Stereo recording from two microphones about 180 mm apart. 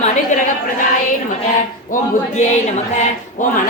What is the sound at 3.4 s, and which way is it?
Speech, 45° left (ahead or behind).